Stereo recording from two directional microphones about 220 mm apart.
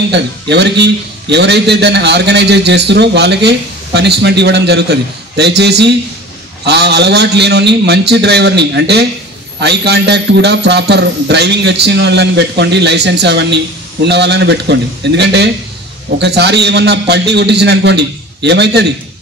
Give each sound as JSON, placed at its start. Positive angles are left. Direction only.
{"t": 0.1, "sound": "a man's voice", "side_deg": -50}